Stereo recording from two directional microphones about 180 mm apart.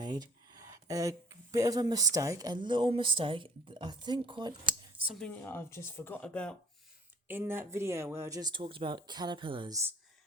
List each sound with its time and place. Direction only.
0.0 s a sound: 20° right (ahead or behind)
2.1 s speech: 20° right (ahead or behind)
5.0 s speech: 5° left (ahead or behind)
7.3 s speech: 10° right (ahead or behind)